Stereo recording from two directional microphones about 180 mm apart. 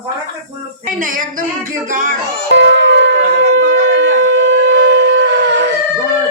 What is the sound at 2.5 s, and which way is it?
Shofar, 85° right.